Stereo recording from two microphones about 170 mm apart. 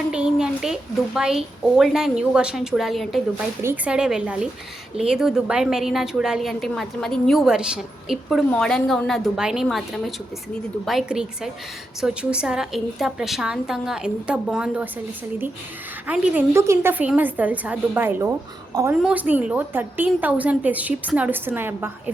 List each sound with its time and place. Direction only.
0.1 s a woman's voice: 5° right (ahead or behind)
16.0 s a woman's voice: 5° right (ahead or behind)
19.0 s a woman's voice: 10° right (ahead or behind)